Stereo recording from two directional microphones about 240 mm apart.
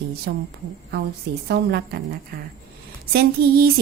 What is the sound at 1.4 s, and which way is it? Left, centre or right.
A woman's voice, right.